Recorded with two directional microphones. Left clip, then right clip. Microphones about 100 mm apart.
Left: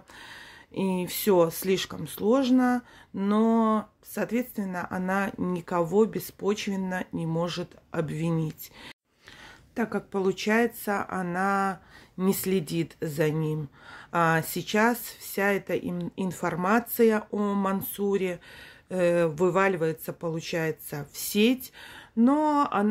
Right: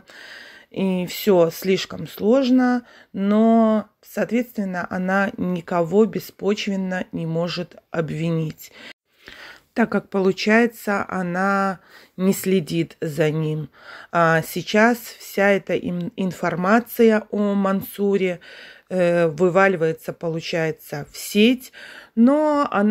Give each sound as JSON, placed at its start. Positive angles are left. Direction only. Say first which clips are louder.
{"t": 0.2, "sound": "speech", "louder": "right 5 dB", "side_deg": -15}
{"t": 9.4, "sound": "a sound", "louder": "right 9 dB", "side_deg": -60}
{"t": 10.2, "sound": "speech", "louder": "right 7 dB", "side_deg": -35}